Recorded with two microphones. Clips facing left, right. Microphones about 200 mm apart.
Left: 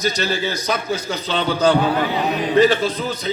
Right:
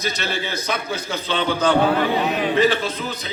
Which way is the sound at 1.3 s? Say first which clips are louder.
Left 2 dB; 40° left (ahead or behind).